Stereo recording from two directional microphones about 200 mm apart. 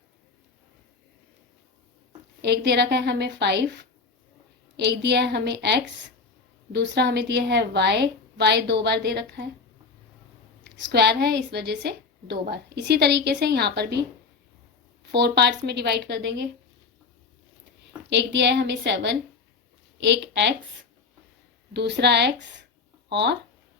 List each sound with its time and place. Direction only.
2.4 s a woman's voice: 55° right (ahead or behind)
10.6 s a woman's voice: 55° right (ahead or behind)
15.0 s a woman's voice: 55° right (ahead or behind)
18.1 s a woman's voice: 65° right (ahead or behind)
21.7 s a woman's voice: 55° right (ahead or behind)